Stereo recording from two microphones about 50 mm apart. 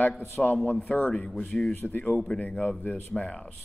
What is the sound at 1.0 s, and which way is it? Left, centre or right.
Speech, left.